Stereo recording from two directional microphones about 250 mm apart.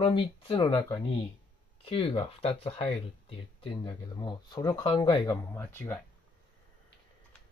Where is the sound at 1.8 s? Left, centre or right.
Left.